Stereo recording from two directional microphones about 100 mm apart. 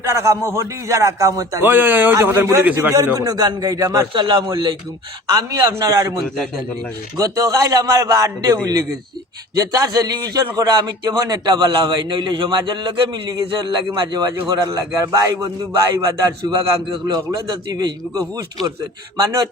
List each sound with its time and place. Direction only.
0.0 s a man's voice: 30° right (ahead or behind)
1.6 s a man's voice: 20° right (ahead or behind)
2.9 s a man's voice: 35° right (ahead or behind)
4.1 s a man's voice: 45° right (ahead or behind)
5.3 s a man's voice: 40° right (ahead or behind)
7.2 s a man's voice: 35° right (ahead or behind)